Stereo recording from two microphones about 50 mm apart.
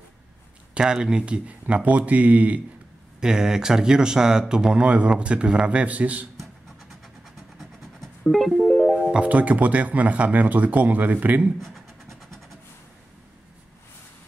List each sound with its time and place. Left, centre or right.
0.7 s speech: centre; by 2.6 s right
3.2 s a man's voice: centre; by 6.2 s right
8.3 s music: centre
9.1 s speech: right